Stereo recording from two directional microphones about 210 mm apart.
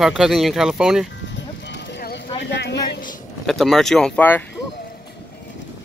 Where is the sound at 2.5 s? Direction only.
55° left (ahead or behind).